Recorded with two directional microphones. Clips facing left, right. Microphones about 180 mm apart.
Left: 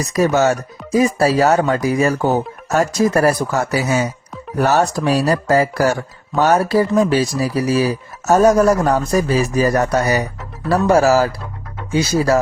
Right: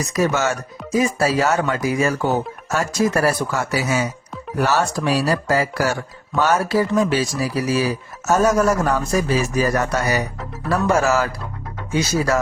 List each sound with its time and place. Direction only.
0.0 s speech: 35° left (ahead or behind)